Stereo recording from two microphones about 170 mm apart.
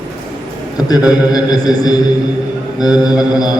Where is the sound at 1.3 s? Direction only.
25° left (ahead or behind).